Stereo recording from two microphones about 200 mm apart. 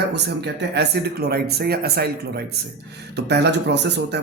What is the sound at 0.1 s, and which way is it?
Speech, 55° right (ahead or behind).